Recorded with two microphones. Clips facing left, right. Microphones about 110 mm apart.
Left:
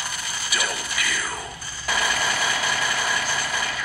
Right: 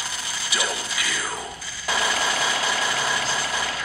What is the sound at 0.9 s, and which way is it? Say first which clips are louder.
Music: even; 15° right (ahead or behind).